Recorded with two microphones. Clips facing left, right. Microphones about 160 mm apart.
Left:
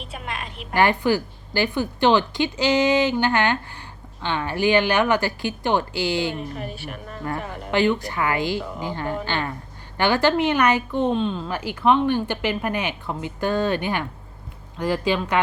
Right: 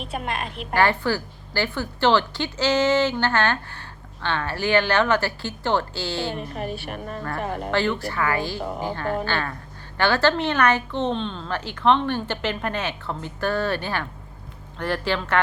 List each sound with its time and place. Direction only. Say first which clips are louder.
0.1 s a sound: right 4 dB; 50° right (ahead or behind)
0.7 s a woman's voice: left 2 dB; 15° left (ahead or behind)
6.9 s a woman's voice: even; 45° right (ahead or behind)
7.7 s a woman's voice: left 5 dB; 15° left (ahead or behind)
8.6 s a woman's voice: right 3 dB; 45° right (ahead or behind)
8.9 s a woman's voice: even; 15° left (ahead or behind)